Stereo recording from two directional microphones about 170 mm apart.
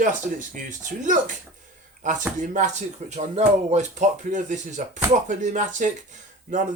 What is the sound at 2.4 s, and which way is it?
Speech, 45° right (ahead or behind).